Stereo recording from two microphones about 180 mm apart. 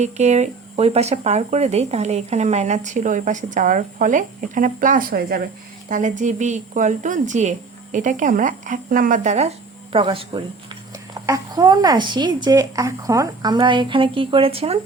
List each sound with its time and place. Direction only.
0.0 s a woman's voice: 40° right (ahead or behind)